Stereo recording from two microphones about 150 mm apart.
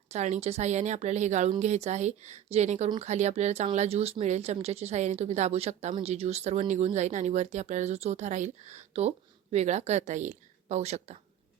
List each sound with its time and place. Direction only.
0.1 s speech: 50° right (ahead or behind)